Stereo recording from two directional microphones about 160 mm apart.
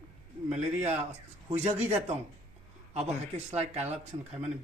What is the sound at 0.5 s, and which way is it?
A man's voice, 45° right (ahead or behind).